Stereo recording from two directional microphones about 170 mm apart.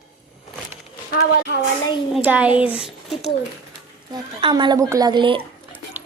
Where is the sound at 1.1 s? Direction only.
65° left (ahead or behind).